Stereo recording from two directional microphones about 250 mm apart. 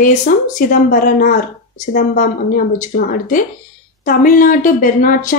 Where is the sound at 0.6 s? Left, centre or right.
Left.